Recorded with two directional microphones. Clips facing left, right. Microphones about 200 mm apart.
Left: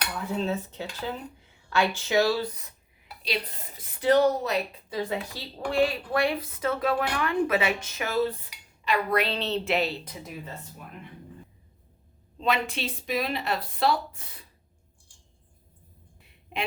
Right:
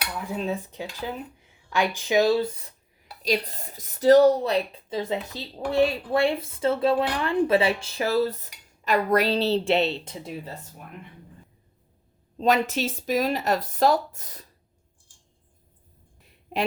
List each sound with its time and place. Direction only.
0.1 s speech: 15° right (ahead or behind); by 3.1 s 30° right (ahead or behind)
3.2 s a woman's voice: 45° right (ahead or behind)
12.4 s speech: 40° right (ahead or behind)